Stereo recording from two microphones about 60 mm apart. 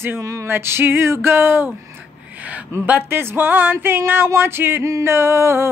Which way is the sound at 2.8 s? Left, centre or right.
Right.